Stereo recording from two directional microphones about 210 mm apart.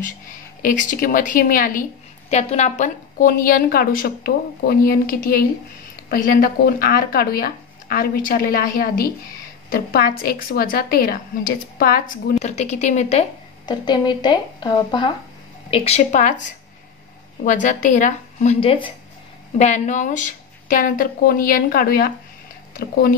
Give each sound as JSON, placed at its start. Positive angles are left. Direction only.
{"t": 0.6, "sound": "a woman's voice", "side_deg": 40}
{"t": 12.4, "sound": "a woman's voice", "side_deg": 30}
{"t": 17.5, "sound": "a woman's voice", "side_deg": 40}
{"t": 19.6, "sound": "a woman's voice", "side_deg": 35}